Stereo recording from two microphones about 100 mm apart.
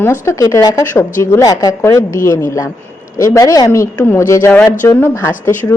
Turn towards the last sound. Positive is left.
turn(degrees=25)  # may be behind; listen again after turning